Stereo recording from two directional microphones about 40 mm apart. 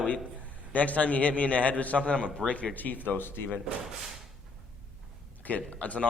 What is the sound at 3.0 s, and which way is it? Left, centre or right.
Speech, left.